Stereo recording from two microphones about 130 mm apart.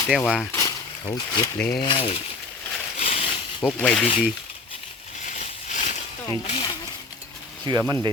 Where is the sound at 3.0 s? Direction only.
50° left (ahead or behind).